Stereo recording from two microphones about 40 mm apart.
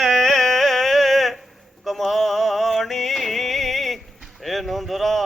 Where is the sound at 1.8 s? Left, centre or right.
Centre.